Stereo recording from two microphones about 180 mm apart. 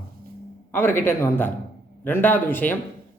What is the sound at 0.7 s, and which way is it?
A man's voice, 10° left (ahead or behind).